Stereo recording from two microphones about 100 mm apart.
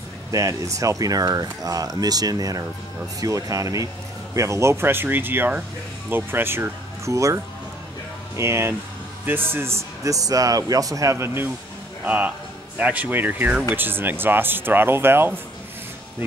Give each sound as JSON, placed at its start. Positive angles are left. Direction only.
{"t": 0.3, "sound": "speech", "side_deg": -35}